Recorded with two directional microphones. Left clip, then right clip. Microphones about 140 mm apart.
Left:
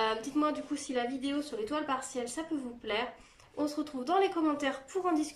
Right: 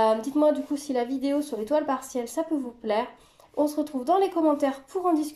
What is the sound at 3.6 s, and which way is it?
A woman's voice, 40° right (ahead or behind).